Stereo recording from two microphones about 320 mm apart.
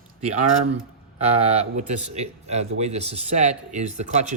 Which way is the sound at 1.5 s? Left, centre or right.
Right.